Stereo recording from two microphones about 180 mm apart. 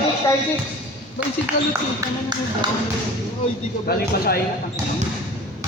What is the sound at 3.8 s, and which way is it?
Speech, 60° left (ahead or behind).